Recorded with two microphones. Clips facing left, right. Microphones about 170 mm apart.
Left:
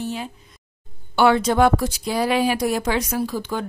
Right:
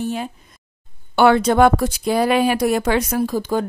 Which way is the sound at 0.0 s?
50° right (ahead or behind).